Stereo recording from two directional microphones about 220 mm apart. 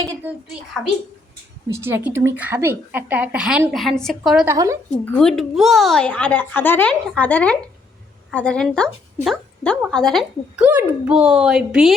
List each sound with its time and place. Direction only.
0.2 s a sound: 5° right (ahead or behind)
1.6 s a woman's voice: 10° right (ahead or behind)
4.4 s a woman's voice: 15° right (ahead or behind)
5.0 s a woman's voice: 5° left (ahead or behind)